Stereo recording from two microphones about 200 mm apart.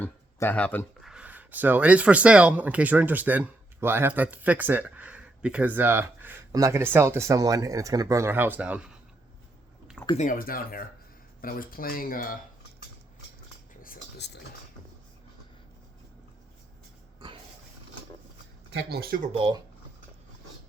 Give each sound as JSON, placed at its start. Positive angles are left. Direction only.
{"t": 0.0, "sound": "speech", "side_deg": 10}
{"t": 1.0, "sound": "speech", "side_deg": -5}
{"t": 10.2, "sound": "speech", "side_deg": 45}
{"t": 13.8, "sound": "a sound", "side_deg": 50}
{"t": 18.7, "sound": "speech", "side_deg": -55}
{"t": 19.3, "sound": "speech", "side_deg": -25}